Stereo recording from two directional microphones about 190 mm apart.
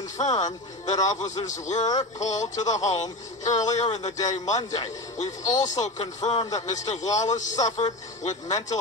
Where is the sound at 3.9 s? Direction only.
35° left (ahead or behind).